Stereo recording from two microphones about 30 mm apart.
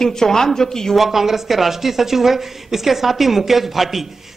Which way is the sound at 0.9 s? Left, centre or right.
Centre.